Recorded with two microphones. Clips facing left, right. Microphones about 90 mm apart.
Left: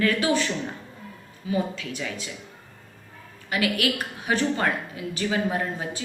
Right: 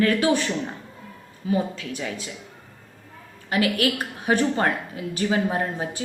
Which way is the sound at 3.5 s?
35° right (ahead or behind).